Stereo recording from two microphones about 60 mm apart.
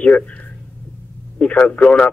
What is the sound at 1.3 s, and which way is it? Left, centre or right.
Speech, left.